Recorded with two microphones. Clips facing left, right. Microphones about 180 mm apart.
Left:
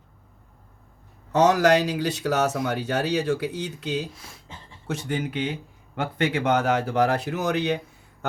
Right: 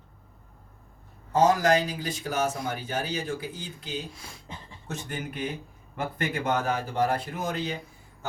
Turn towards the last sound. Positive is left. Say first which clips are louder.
# left 7 dB
turn(degrees=70)  # may be behind; listen again after turning